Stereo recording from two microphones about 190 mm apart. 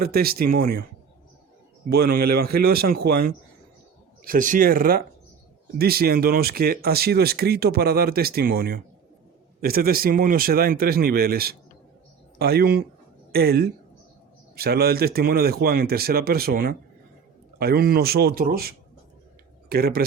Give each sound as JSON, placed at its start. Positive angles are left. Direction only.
{"t": 0.0, "sound": "speech", "side_deg": -55}
{"t": 1.9, "sound": "a woman's voice", "side_deg": -55}